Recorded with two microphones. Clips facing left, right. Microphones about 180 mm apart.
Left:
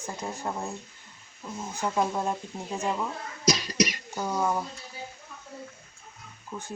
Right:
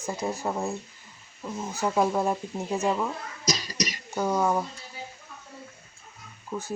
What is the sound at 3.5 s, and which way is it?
Cough, 60° left (ahead or behind).